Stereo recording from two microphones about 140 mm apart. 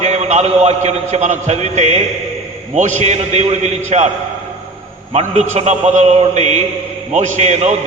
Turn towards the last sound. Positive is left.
turn(degrees=-55)  # may be behind; listen again after turning